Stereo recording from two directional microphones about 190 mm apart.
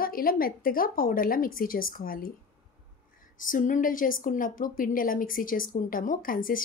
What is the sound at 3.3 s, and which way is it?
A woman's voice, 45° left (ahead or behind).